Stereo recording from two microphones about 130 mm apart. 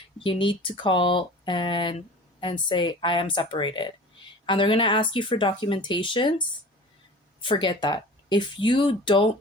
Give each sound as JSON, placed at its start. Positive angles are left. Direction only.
{"t": 0.2, "sound": "speech", "side_deg": 40}
{"t": 7.4, "sound": "speech", "side_deg": 35}